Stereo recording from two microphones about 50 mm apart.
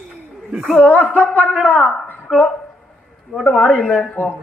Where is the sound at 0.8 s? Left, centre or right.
Left.